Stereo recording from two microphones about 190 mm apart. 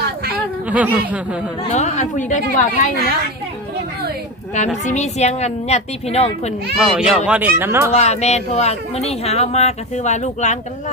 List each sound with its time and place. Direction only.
0.7 s speech: 5° right (ahead or behind)
1.7 s speech: 40° left (ahead or behind)
4.9 s speech: 35° left (ahead or behind)
6.7 s speech: 5° right (ahead or behind)
7.9 s speech: 35° left (ahead or behind)